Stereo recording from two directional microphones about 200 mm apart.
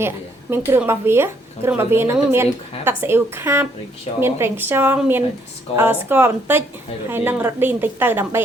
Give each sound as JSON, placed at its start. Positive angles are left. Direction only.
{"t": 0.5, "sound": "a woman's voice", "side_deg": -10}
{"t": 5.7, "sound": "speech", "side_deg": 30}
{"t": 6.1, "sound": "a woman's voice", "side_deg": -10}